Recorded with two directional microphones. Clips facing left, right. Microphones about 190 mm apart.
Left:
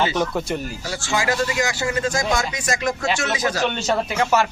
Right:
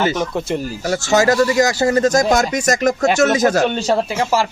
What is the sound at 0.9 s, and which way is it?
Speech, 40° right (ahead or behind).